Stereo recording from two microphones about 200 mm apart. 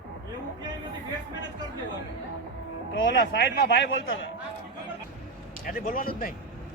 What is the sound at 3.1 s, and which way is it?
Speech, 60° left (ahead or behind).